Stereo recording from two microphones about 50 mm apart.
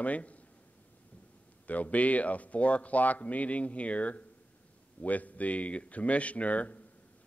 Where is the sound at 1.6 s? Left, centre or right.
Left.